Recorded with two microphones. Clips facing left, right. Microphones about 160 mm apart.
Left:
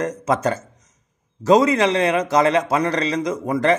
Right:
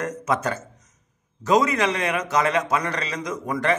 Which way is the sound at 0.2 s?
35° left (ahead or behind).